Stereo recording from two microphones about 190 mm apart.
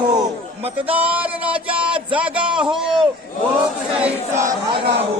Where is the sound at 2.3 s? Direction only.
5° right (ahead or behind).